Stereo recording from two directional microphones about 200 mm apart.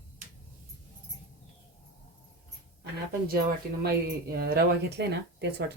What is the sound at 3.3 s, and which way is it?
Speech, 50° right (ahead or behind).